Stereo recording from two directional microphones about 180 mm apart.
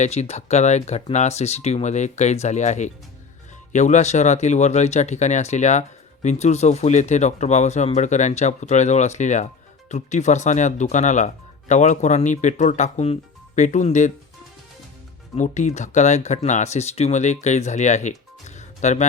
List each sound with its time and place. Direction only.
0.0 s speech: 35° left (ahead or behind)
15.4 s speech: 40° left (ahead or behind)
18.4 s music: 40° left (ahead or behind)